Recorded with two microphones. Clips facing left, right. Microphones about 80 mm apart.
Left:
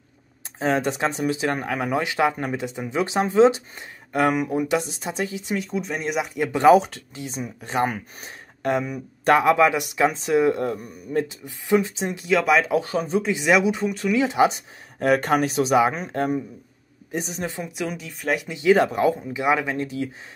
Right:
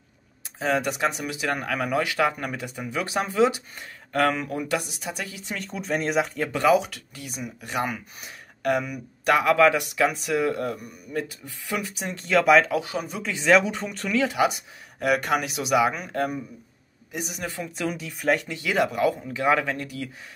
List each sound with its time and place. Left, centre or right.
0.6 s speech: left
5.6 s speech: centre
6.5 s speech: left
12.2 s speech: centre
12.7 s speech: left
13.2 s speech: centre
14.1 s speech: left
17.7 s speech: centre
18.4 s speech: left